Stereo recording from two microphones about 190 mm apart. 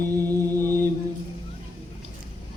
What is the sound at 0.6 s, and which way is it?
Mantra, 15° right (ahead or behind).